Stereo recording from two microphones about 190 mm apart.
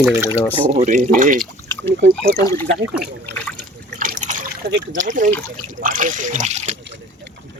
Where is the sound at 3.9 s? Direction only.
45° right (ahead or behind).